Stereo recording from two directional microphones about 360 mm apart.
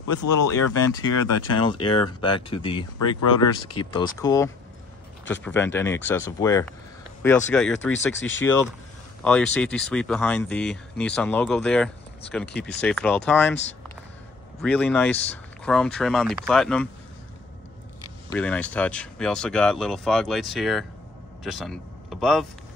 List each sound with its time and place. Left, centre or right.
0.0 s speech: left
1.3 s speech: left
1.6 s speech: centre
7.9 s speech: left
9.2 s speech: centre
14.6 s speech: centre
18.3 s speech: centre